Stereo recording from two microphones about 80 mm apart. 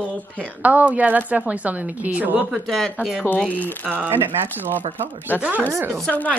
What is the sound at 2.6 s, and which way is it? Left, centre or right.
Speech, centre.